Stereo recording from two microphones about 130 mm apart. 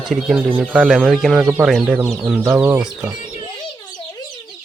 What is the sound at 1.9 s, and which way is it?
Speech, 15° right (ahead or behind).